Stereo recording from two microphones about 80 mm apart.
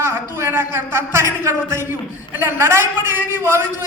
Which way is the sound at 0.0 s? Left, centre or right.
Right.